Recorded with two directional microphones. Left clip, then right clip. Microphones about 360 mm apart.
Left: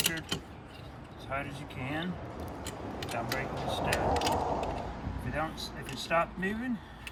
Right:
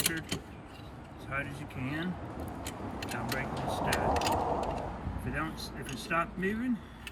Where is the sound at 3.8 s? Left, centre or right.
Right.